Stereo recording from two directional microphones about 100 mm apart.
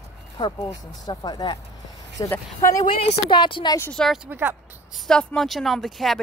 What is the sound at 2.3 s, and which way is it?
Speech, 30° left (ahead or behind).